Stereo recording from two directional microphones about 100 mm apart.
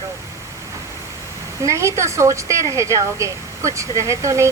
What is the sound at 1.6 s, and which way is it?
A woman's voice, 30° right (ahead or behind).